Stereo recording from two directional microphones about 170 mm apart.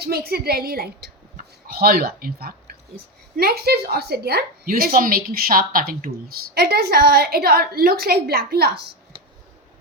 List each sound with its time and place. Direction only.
0.0 s a woman's voice: 65° right (ahead or behind)